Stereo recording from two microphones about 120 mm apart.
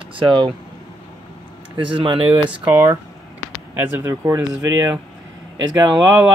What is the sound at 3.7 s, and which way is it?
Speech, 15° right (ahead or behind).